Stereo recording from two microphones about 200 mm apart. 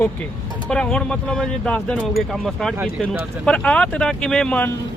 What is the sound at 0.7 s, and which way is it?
Speech, 5° left (ahead or behind).